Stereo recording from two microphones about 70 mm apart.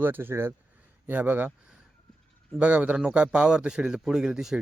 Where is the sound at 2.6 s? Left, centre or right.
Right.